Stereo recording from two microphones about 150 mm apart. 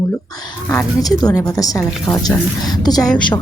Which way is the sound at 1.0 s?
25° left (ahead or behind).